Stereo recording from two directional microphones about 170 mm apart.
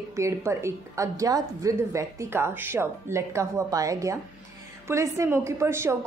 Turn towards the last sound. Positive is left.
turn(degrees=-15)  # may be behind; listen again after turning